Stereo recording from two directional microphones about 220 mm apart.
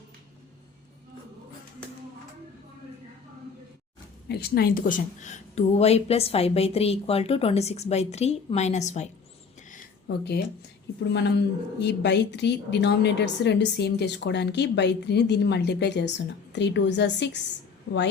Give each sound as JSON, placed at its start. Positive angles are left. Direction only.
{"t": 4.3, "sound": "a woman's voice", "side_deg": 45}
{"t": 9.6, "sound": "a sound", "side_deg": 40}
{"t": 11.0, "sound": "speech", "side_deg": 50}